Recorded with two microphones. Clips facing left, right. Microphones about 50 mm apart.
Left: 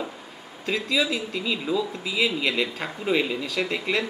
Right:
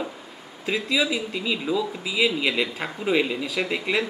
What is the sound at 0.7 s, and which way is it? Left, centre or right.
Speech, centre.